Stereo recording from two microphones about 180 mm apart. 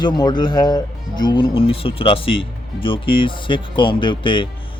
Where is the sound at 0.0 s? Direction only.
25° left (ahead or behind).